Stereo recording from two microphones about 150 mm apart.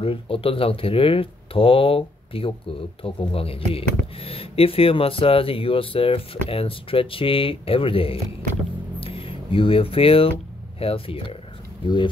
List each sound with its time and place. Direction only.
0.0 s speech: 40° left (ahead or behind)